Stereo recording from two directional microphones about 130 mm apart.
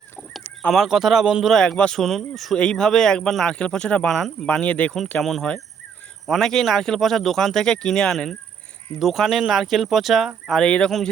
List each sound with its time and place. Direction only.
0.3 s speech: centre (ahead or behind)